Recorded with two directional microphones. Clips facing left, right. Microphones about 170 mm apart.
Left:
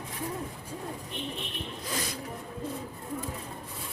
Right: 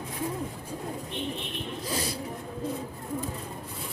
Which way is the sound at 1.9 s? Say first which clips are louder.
Right 3 dB; 35° right (ahead or behind).